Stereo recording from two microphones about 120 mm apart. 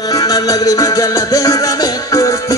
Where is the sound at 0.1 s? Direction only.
30° left (ahead or behind).